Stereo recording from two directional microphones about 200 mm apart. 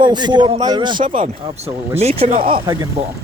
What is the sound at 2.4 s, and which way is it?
Speech, 45° right (ahead or behind).